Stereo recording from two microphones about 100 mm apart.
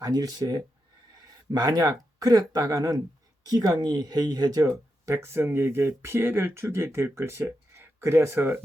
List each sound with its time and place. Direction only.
0.0 s speech: 40° right (ahead or behind); by 8.6 s 25° right (ahead or behind)